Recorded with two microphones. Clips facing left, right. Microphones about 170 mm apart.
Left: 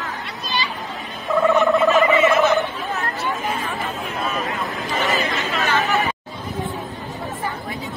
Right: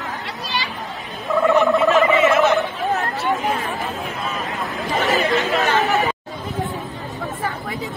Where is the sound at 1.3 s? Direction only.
Centre (ahead or behind).